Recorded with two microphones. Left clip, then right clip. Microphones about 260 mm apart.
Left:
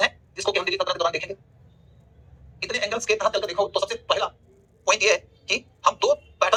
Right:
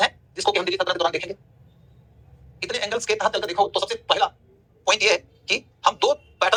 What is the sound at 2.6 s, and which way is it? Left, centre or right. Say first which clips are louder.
Speech: even; right.